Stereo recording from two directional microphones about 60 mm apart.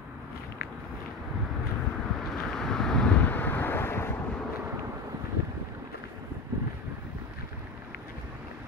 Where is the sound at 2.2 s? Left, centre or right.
Centre.